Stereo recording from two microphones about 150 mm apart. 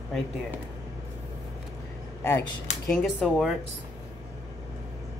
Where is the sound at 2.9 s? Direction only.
Centre (ahead or behind).